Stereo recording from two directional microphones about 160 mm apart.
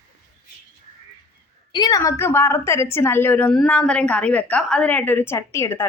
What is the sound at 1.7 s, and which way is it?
A woman's voice, 25° left (ahead or behind).